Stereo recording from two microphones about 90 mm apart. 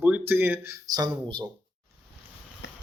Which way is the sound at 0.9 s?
45° right (ahead or behind).